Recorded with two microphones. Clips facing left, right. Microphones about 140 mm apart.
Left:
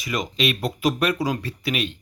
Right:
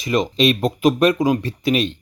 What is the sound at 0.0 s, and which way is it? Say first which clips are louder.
Speech: right 7 dB; 25° right (ahead or behind).